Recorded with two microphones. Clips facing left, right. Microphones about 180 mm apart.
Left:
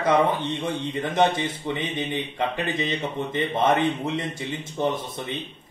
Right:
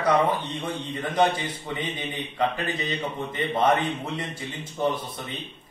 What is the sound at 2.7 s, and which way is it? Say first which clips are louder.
Speech: left 3 dB; 25° left (ahead or behind).